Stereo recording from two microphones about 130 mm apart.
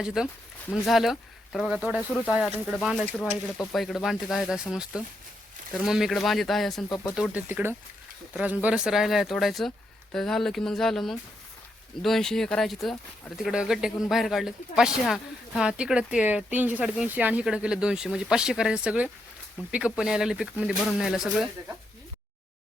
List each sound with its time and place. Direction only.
0.0 s speech: 5° right (ahead or behind)
2.0 s speech: 10° left (ahead or behind)
2.3 s speech: 5° right (ahead or behind)
3.1 s speech: 10° left (ahead or behind)
6.8 s speech: 25° left (ahead or behind)
7.2 s speech: 15° right (ahead or behind)